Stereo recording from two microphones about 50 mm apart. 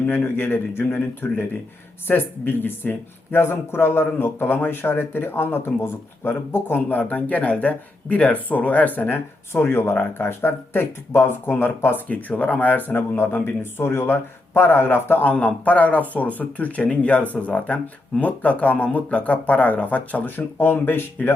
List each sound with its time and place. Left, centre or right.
0.2 s speech: left
7.0 s speech: left
12.0 s speech: left
13.6 s speech: left
15.2 s speech: left